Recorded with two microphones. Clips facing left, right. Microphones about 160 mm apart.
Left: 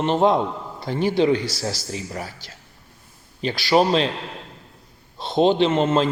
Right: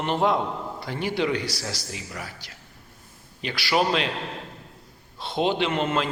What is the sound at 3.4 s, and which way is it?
Speech, 35° left (ahead or behind).